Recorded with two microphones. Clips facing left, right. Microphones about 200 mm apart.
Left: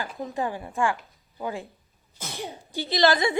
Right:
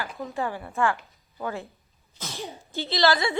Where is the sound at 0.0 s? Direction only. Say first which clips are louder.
Left 1 dB; 20° left (ahead or behind).